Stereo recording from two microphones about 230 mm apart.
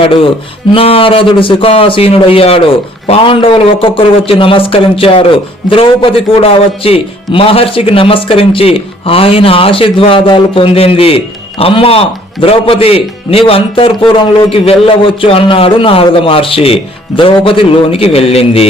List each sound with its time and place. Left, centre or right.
0.0 s speech: left